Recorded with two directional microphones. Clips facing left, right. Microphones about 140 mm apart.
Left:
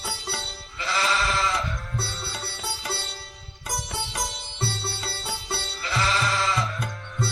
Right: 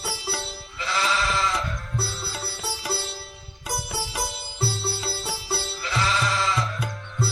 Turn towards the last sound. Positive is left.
turn(degrees=0)  # may be behind; listen again after turning